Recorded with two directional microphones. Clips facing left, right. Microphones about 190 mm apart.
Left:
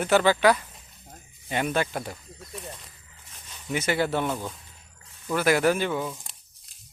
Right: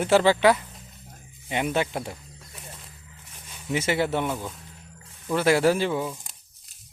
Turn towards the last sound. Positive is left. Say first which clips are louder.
# right 2 dB
turn(degrees=-25)  # may be behind; listen again after turning